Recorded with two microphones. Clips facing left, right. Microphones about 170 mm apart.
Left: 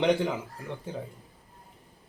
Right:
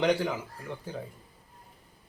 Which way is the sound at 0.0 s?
20° left (ahead or behind).